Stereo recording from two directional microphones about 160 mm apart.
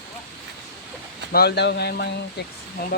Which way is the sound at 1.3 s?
85° left.